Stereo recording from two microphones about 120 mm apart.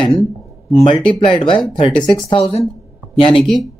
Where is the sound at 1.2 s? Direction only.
45° left (ahead or behind).